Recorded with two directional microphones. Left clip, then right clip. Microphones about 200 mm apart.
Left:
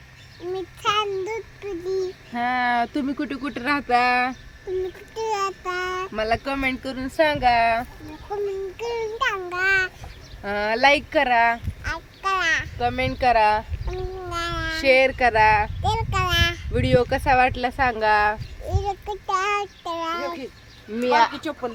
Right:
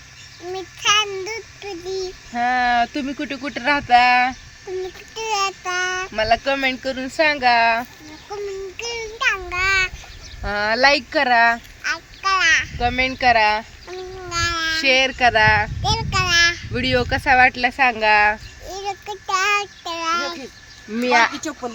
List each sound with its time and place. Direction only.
0.5 s child singing: 25° left (ahead or behind)
2.3 s speech: centre (ahead or behind)
5.1 s child singing: 15° left (ahead or behind)
6.1 s speech: 5° right (ahead or behind)
8.8 s child singing: 25° left (ahead or behind)
10.4 s speech: 10° right (ahead or behind)
11.8 s a sound: 15° left (ahead or behind)
12.8 s speech: 5° right (ahead or behind)
14.3 s a sound: 25° left (ahead or behind)
14.8 s speech: 10° right (ahead or behind)
15.8 s child singing: 20° left (ahead or behind)
16.7 s speech: 10° right (ahead or behind)
18.7 s child singing: 20° left (ahead or behind)
21.0 s speech: 25° right (ahead or behind)